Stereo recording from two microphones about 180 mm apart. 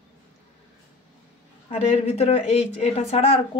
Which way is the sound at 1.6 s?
35° left (ahead or behind).